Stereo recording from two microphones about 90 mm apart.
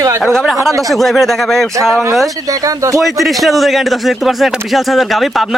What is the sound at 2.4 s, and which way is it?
Speech, 40° right (ahead or behind).